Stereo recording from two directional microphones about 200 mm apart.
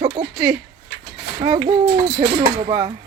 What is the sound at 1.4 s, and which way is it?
Speech, 20° right (ahead or behind).